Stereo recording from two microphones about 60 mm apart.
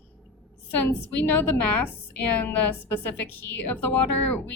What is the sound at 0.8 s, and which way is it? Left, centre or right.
A woman's voice, left.